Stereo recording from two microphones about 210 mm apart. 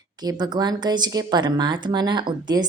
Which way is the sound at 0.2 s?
20° right (ahead or behind).